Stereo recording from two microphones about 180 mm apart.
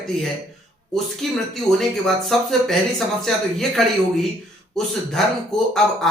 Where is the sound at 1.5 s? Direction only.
Centre (ahead or behind).